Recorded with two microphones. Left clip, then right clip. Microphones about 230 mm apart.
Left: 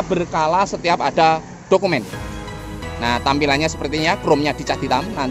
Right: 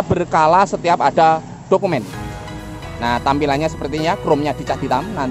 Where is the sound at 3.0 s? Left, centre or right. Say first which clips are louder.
Right 1 dB; centre.